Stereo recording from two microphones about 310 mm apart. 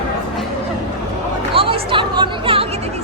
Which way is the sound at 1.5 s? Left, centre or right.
Centre.